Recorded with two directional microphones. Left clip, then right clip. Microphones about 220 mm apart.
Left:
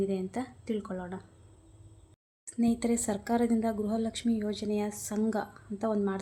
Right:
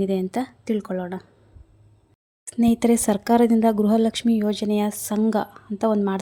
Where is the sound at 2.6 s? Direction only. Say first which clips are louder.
Right 10 dB; 40° right (ahead or behind).